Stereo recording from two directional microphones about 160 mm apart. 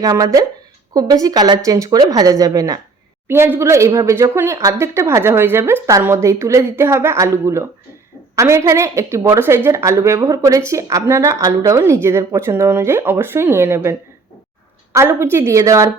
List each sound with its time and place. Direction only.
0.0 s a woman's voice: 20° right (ahead or behind)
14.9 s a woman's voice: 15° right (ahead or behind)